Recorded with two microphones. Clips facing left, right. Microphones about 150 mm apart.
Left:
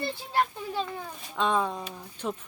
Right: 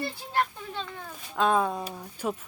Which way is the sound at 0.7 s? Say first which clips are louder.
Left 5 dB; 10° left (ahead or behind).